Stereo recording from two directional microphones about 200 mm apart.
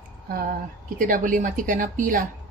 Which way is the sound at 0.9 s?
45° right (ahead or behind).